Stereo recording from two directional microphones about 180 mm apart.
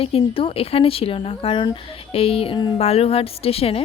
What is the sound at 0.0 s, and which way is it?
A woman's voice, 30° left (ahead or behind).